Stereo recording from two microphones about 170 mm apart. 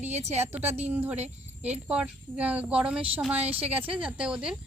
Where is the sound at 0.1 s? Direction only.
40° right (ahead or behind).